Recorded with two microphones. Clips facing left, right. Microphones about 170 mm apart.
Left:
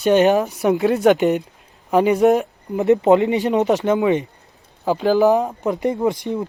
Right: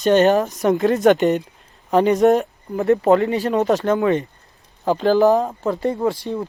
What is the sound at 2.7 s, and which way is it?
Speech, 20° left (ahead or behind).